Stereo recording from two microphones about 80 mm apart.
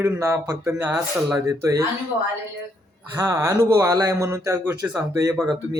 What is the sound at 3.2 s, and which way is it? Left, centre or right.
Speech, right.